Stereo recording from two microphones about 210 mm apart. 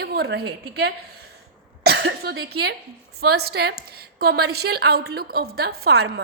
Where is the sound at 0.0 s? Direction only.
50° right (ahead or behind).